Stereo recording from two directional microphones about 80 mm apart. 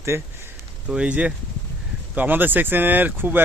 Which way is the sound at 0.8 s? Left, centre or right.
Centre.